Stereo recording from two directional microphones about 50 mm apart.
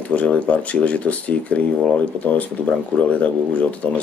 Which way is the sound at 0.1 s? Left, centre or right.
Left.